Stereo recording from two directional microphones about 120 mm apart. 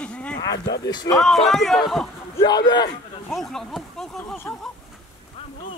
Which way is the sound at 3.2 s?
Centre (ahead or behind).